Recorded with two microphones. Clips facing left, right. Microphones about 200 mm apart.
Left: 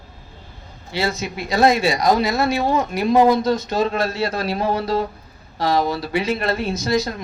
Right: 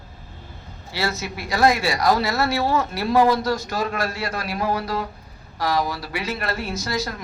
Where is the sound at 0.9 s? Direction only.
20° left (ahead or behind).